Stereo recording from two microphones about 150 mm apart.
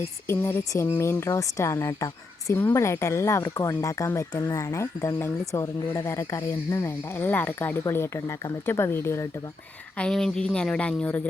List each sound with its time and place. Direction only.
0.0 s speech: 15° left (ahead or behind)
10.0 s speech: 5° left (ahead or behind)